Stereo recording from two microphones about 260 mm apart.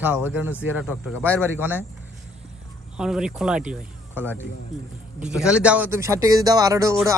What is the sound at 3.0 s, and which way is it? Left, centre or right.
Speech, centre.